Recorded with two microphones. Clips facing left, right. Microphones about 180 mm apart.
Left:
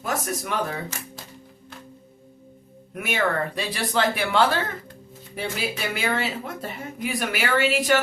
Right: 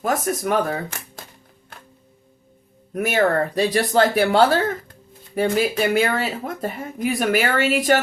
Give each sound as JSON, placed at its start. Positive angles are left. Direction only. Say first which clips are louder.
{"t": 0.0, "sound": "speech", "louder": "right 6 dB", "side_deg": -45}
{"t": 2.9, "sound": "speech", "louder": "right 6 dB", "side_deg": -40}